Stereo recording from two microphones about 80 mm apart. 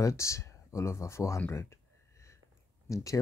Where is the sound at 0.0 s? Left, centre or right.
Left.